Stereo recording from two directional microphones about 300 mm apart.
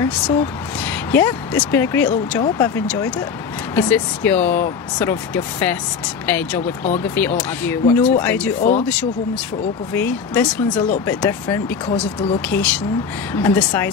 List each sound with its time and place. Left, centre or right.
0.0 s speech: centre
8.6 s speech: left
9.9 s speech: centre